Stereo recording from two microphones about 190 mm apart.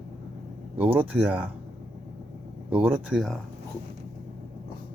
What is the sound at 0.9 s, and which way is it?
Speech, 10° right (ahead or behind).